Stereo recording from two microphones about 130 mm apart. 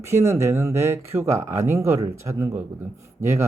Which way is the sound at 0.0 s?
20° right (ahead or behind).